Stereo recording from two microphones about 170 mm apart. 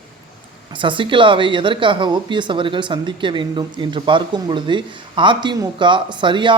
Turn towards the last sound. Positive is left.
turn(degrees=-30)  # may be behind; listen again after turning